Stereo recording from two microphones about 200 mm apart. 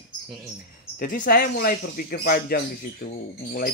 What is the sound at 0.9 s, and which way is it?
Speech, 45° left (ahead or behind).